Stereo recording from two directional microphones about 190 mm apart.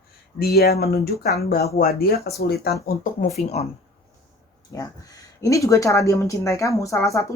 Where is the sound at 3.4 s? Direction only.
35° left (ahead or behind).